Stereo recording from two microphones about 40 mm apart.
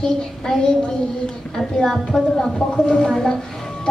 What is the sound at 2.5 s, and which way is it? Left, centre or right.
Speech, centre.